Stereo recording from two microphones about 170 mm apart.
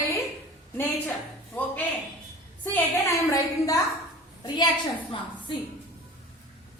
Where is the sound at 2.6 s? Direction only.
15° left (ahead or behind).